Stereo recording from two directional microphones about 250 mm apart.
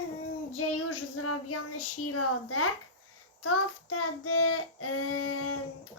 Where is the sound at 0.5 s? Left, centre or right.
Left.